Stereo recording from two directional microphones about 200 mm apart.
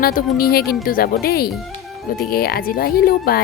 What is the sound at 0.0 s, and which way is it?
Speech, 45° left (ahead or behind).